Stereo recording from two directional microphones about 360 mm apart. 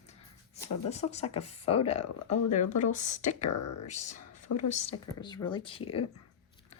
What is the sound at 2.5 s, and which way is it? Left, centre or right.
Speech, left.